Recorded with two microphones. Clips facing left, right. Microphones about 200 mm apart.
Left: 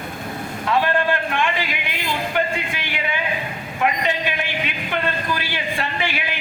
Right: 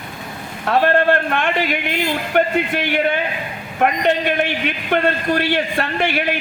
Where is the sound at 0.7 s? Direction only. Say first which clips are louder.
Right 5 dB; 55° right (ahead or behind).